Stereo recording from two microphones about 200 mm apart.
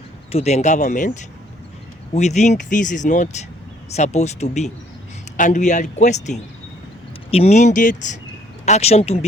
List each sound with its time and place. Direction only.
0.3 s speech: 30° left (ahead or behind)